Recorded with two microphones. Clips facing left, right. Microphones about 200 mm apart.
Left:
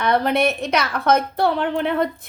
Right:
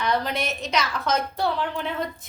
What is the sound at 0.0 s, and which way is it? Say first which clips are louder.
A woman's voice: left 7 dB; 60° left (ahead or behind).